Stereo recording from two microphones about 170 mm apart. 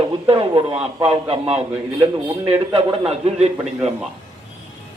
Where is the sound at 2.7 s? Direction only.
35° right (ahead or behind).